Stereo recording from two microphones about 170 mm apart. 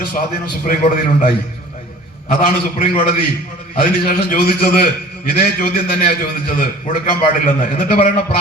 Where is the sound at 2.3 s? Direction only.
55° left (ahead or behind).